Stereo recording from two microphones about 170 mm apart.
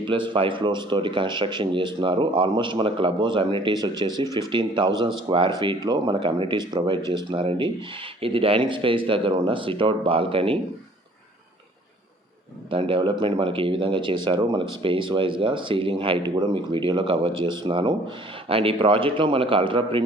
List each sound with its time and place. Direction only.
0.0 s speech: 30° right (ahead or behind)
12.7 s speech: 30° right (ahead or behind)